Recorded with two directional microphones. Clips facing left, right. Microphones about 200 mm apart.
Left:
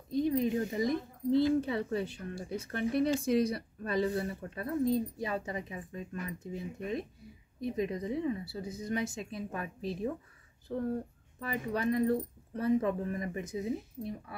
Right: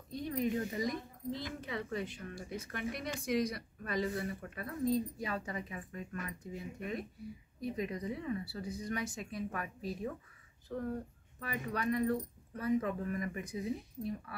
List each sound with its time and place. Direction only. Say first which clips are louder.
0.2 s speech: left 5 dB; 25° left (ahead or behind)